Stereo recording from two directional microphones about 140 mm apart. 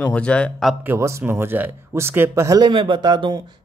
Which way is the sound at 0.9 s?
20° right (ahead or behind).